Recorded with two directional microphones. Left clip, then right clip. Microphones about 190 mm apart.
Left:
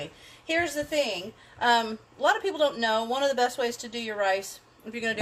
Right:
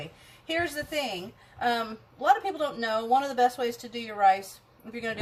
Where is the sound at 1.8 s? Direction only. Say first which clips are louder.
Left 5 dB; 40° left (ahead or behind).